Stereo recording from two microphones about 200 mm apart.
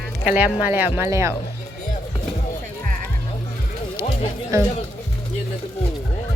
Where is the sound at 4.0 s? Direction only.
15° right (ahead or behind).